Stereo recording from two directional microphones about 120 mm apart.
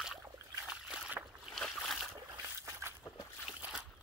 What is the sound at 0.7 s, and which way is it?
Boat, 5° right (ahead or behind).